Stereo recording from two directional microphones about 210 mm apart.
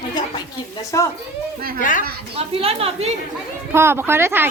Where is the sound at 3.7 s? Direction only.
10° right (ahead or behind).